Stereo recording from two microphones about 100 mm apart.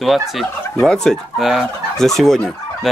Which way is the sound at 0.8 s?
5° left (ahead or behind).